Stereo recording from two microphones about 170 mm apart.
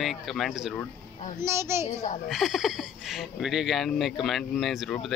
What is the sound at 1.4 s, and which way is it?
Speech, 15° right (ahead or behind).